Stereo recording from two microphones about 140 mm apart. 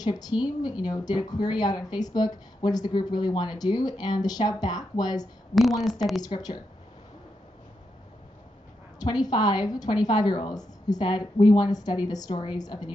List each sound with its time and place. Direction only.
0.0 s speech: 30° left (ahead or behind)
5.5 s a woman's voice: centre (ahead or behind)
6.2 s speech: 30° left (ahead or behind)
9.0 s a woman's voice: 30° left (ahead or behind)